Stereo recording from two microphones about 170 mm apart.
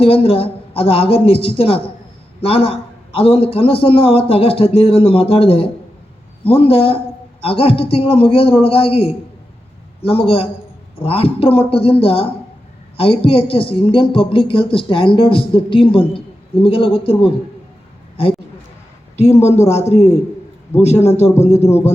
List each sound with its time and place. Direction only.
0.0 s speech: 35° left (ahead or behind)
19.1 s speech: 40° left (ahead or behind)